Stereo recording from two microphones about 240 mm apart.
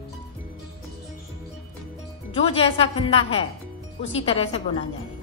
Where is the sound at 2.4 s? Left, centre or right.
Left.